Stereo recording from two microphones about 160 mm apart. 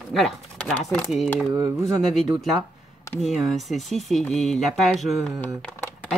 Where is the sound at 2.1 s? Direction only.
Centre (ahead or behind).